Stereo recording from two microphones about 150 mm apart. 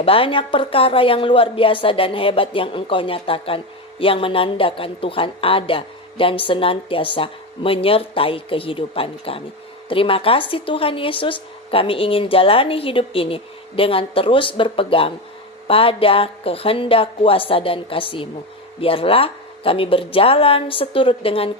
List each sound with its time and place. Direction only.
0.0 s a woman's voice: 40° left (ahead or behind)